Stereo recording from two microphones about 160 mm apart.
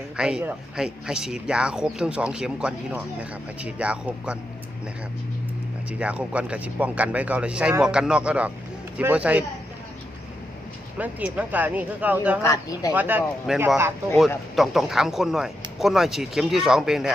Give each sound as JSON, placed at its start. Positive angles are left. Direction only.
{"t": 0.2, "sound": "speech", "side_deg": -5}
{"t": 5.9, "sound": "speech", "side_deg": -10}
{"t": 10.9, "sound": "speech", "side_deg": -10}
{"t": 12.4, "sound": "speech", "side_deg": 20}
{"t": 12.9, "sound": "speech", "side_deg": -10}